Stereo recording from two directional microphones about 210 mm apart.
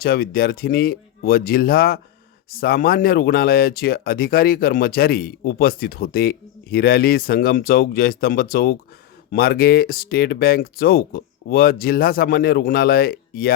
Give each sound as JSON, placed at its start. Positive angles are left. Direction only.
{"t": 0.0, "sound": "speech", "side_deg": 45}